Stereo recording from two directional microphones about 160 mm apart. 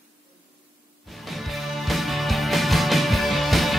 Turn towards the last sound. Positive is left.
turn(degrees=0)  # may be behind; listen again after turning